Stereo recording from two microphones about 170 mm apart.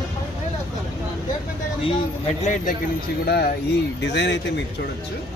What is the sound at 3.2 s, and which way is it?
Speech, 70° left (ahead or behind).